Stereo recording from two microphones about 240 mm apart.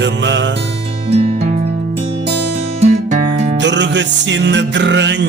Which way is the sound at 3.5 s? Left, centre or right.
Right.